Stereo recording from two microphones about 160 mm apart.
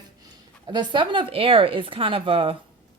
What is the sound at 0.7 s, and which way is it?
Speech, 30° right (ahead or behind).